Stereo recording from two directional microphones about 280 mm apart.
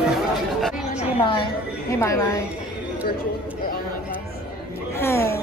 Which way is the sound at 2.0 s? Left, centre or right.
Centre.